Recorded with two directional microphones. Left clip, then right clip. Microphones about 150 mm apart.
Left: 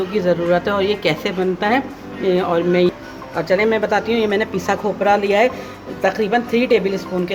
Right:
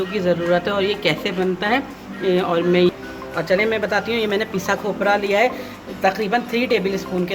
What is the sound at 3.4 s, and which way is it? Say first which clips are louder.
A woman's voice: left 2 dB; 15° left (ahead or behind).